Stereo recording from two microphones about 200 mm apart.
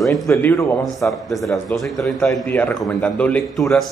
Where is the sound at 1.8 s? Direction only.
Centre (ahead or behind).